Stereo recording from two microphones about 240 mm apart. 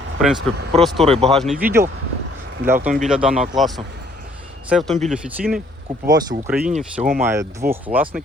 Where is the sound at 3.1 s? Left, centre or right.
Centre.